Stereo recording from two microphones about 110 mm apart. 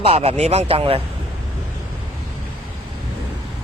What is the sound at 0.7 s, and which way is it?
Speech, 60° right (ahead or behind).